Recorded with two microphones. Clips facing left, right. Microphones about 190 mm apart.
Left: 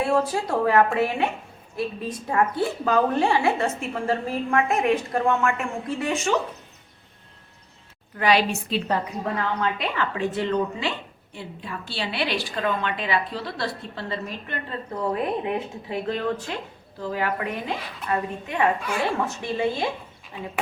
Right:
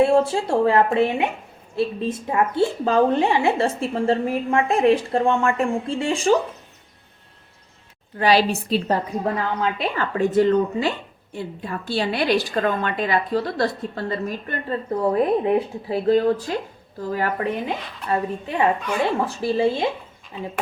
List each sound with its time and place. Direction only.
0.0 s a woman's voice: 25° right (ahead or behind)
8.1 s a woman's voice: 30° right (ahead or behind)
17.4 s a woman's voice: 30° right (ahead or behind)